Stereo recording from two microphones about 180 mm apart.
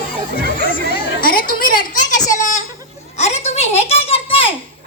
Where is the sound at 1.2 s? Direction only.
55° left (ahead or behind).